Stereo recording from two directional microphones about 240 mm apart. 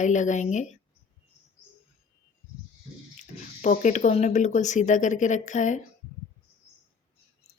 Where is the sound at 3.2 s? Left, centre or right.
Left.